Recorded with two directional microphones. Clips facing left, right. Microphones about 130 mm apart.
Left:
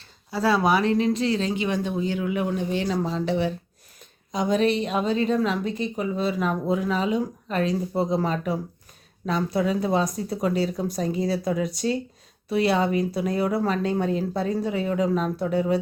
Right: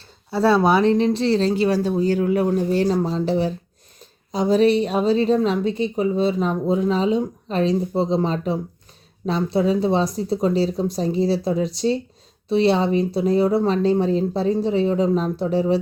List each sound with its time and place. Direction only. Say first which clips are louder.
0.3 s a woman's voice: right 4 dB; 30° right (ahead or behind)